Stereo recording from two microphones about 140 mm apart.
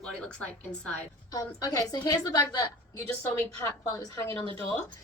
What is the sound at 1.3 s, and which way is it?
A woman's voice, 25° left (ahead or behind).